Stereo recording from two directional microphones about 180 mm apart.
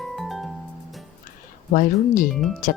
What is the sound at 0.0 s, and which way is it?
Music, centre (ahead or behind).